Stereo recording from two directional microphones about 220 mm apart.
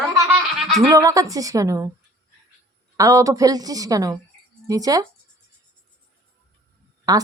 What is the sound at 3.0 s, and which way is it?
A woman's voice, 15° right (ahead or behind).